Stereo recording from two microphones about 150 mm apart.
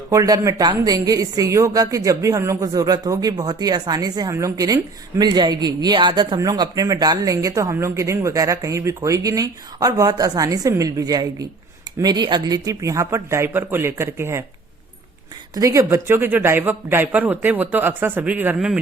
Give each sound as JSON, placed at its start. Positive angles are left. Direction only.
{"t": 0.1, "sound": "a woman's voice", "side_deg": -25}
{"t": 15.5, "sound": "speech", "side_deg": -25}